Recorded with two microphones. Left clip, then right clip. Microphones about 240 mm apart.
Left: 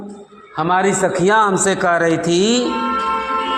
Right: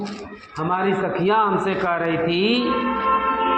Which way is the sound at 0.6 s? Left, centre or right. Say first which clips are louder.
Left 6 dB; left.